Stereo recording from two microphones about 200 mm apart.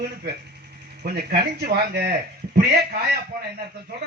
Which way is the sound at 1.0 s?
50° right (ahead or behind).